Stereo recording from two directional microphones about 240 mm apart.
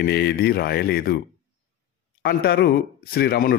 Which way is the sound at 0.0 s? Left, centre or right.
Left.